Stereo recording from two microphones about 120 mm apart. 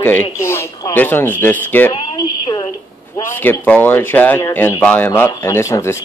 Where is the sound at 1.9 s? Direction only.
40° left (ahead or behind).